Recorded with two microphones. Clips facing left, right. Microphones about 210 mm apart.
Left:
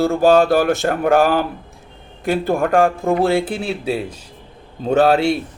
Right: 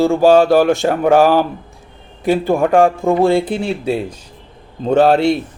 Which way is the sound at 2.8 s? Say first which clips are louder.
Right 3 dB; 35° right (ahead or behind).